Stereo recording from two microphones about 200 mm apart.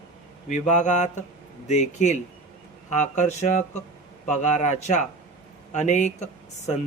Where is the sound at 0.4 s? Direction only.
35° left (ahead or behind).